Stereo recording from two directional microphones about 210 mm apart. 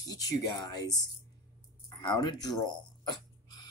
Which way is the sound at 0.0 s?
15° left (ahead or behind).